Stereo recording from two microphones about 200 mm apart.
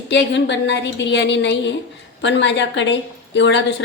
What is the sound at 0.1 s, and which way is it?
A woman's voice, 60° left (ahead or behind).